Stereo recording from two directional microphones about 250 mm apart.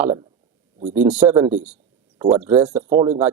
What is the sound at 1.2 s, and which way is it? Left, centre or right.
Speech, centre.